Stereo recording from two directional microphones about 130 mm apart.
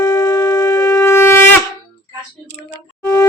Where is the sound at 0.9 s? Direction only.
20° left (ahead or behind).